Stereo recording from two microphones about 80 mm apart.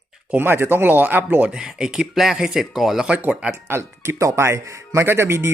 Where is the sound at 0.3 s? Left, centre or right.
Right.